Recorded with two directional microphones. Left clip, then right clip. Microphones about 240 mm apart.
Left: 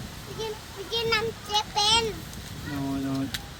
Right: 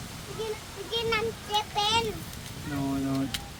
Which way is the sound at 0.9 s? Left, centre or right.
Left.